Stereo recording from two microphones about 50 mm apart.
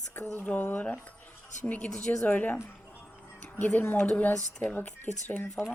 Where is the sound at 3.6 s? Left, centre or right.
Left.